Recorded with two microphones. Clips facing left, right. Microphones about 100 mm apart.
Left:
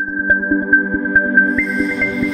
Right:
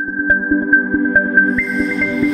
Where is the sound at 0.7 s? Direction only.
Centre (ahead or behind).